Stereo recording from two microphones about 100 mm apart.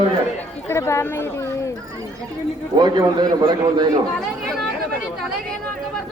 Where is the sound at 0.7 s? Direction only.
30° left (ahead or behind).